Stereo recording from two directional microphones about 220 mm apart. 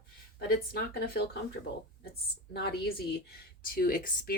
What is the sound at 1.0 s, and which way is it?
Speech, 45° left (ahead or behind).